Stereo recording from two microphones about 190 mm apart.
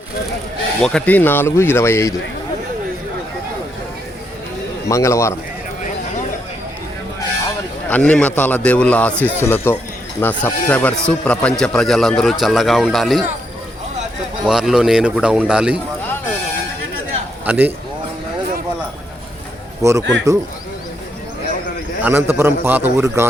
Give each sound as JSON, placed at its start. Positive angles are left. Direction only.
{"t": 0.8, "sound": "a man's voice", "side_deg": 5}
{"t": 4.9, "sound": "a man's voice", "side_deg": 15}
{"t": 7.9, "sound": "a man's voice", "side_deg": 5}
{"t": 14.4, "sound": "a man's voice", "side_deg": 0}
{"t": 17.4, "sound": "a man's voice", "side_deg": -10}
{"t": 19.8, "sound": "a man's voice", "side_deg": -15}
{"t": 22.0, "sound": "a man's voice", "side_deg": -10}